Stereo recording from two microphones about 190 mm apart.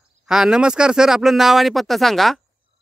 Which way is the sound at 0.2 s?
5° right (ahead or behind).